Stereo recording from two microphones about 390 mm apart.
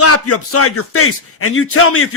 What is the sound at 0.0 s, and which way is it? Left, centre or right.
Speech, left.